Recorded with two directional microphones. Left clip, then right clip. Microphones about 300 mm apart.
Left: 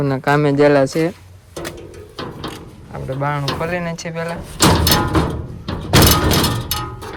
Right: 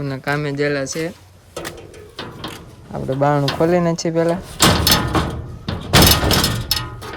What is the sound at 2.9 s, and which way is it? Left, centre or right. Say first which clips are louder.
Speech: right 5 dB; centre.